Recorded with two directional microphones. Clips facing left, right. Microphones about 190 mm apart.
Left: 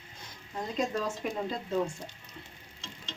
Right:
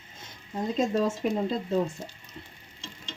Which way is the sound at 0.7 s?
30° right (ahead or behind).